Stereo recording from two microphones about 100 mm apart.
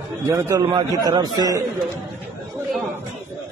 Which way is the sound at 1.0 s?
40° right (ahead or behind).